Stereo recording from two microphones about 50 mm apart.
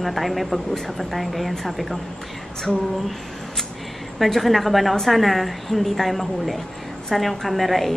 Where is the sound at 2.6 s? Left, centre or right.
Centre.